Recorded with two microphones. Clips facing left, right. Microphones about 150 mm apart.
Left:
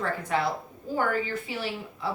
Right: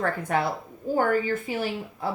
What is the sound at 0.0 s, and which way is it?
A woman's voice, 50° right (ahead or behind).